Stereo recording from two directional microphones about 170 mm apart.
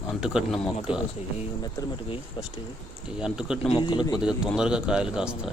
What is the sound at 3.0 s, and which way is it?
Speech, 5° right (ahead or behind).